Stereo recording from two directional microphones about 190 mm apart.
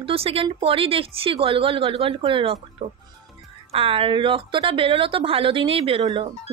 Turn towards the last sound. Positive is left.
turn(degrees=-25)  # may be behind; listen again after turning